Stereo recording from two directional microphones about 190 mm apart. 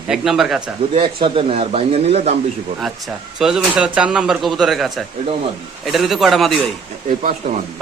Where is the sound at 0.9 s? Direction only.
30° right (ahead or behind).